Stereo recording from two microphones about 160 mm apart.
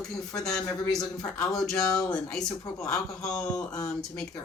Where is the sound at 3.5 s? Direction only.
20° left (ahead or behind).